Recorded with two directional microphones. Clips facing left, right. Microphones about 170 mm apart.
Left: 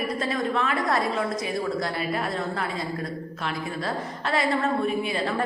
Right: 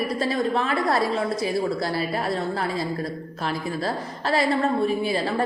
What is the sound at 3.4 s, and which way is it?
A woman's voice, 35° right (ahead or behind).